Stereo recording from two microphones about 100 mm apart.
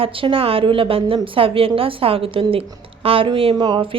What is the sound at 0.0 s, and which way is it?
A woman's voice, 65° right (ahead or behind).